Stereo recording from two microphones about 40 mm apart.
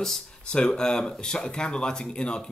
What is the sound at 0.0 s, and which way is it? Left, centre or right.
Speech, centre.